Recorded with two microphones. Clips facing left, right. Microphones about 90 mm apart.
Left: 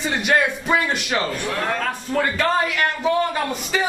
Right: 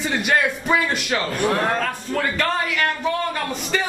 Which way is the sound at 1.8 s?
5° left (ahead or behind).